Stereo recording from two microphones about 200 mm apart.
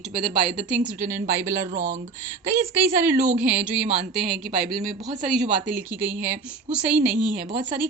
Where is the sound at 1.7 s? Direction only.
55° right (ahead or behind).